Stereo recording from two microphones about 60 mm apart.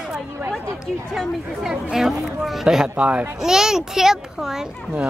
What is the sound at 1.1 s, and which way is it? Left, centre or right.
A child's voice, centre.